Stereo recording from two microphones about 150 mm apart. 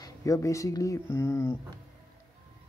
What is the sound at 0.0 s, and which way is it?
Speech, 20° left (ahead or behind).